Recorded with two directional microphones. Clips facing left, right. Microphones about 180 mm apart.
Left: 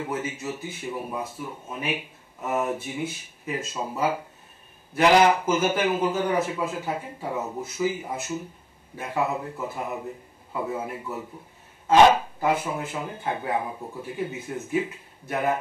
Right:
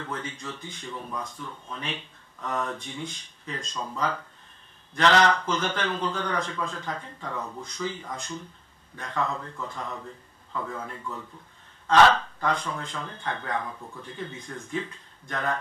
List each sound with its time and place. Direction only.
0.0 s speech: 10° left (ahead or behind)
7.3 s speech: 25° left (ahead or behind)
7.6 s a man's voice: 10° left (ahead or behind)